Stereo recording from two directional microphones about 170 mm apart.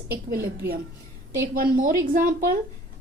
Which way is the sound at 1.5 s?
55° right (ahead or behind).